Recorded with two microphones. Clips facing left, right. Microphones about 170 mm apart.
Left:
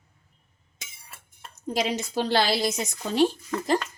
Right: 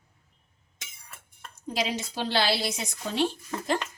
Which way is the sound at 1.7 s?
45° left (ahead or behind).